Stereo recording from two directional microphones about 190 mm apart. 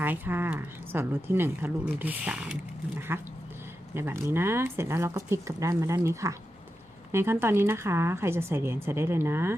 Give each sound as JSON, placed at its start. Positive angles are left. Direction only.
{"t": 0.0, "sound": "speech", "side_deg": -10}